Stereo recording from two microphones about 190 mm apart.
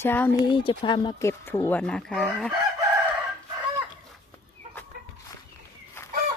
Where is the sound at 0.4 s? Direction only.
25° left (ahead or behind).